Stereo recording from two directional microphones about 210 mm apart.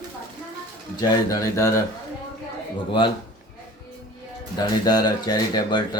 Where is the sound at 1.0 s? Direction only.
15° left (ahead or behind).